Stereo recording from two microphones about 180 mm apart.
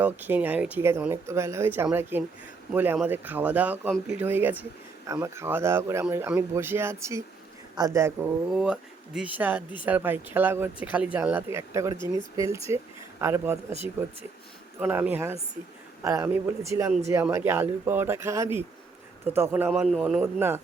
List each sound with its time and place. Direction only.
0.0 s speech: 10° right (ahead or behind)
8.5 s speech: 5° right (ahead or behind)
14.8 s a man's voice: 10° right (ahead or behind)
20.2 s speech: 10° right (ahead or behind)